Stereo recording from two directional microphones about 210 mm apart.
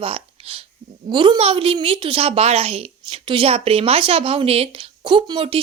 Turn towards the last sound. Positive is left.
turn(degrees=-25)  # may be behind; listen again after turning